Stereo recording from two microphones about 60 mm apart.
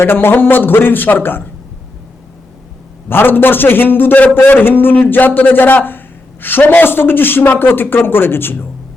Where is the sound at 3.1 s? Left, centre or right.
Left.